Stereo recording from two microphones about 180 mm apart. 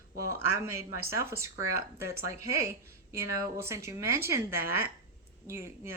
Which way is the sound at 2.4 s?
15° right (ahead or behind).